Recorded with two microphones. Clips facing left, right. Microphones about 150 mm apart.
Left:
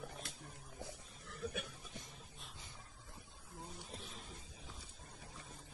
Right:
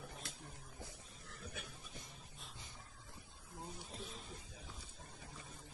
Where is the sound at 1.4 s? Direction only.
65° left (ahead or behind).